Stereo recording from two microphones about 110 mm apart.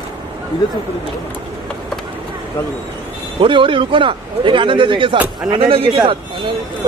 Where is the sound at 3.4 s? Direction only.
50° right (ahead or behind).